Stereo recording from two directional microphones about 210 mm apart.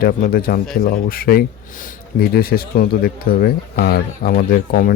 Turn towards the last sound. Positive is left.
turn(degrees=45)  # may be behind; listen again after turning